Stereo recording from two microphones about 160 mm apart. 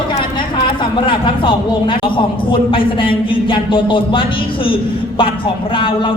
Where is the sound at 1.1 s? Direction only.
30° left (ahead or behind).